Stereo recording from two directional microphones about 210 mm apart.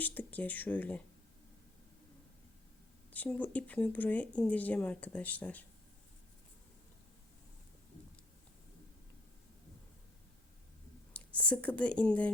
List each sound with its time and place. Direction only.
0.0 s speech: 10° left (ahead or behind)
3.1 s speech: 5° left (ahead or behind)
11.1 s speech: 5° left (ahead or behind)